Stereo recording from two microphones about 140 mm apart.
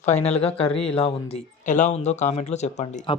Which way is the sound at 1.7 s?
60° left (ahead or behind).